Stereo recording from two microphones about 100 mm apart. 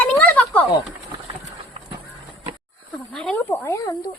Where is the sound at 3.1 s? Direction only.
10° left (ahead or behind).